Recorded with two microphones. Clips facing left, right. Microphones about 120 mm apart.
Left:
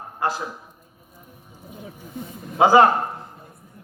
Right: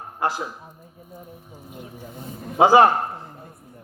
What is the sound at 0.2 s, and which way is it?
Speech, 20° right (ahead or behind).